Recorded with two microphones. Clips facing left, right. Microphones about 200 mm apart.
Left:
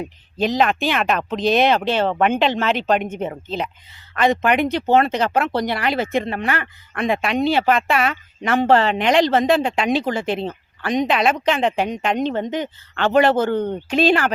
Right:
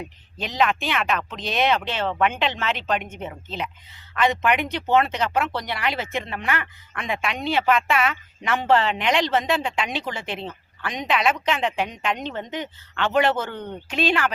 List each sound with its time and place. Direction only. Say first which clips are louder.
0.3 s speech: left 5 dB; 40° left (ahead or behind)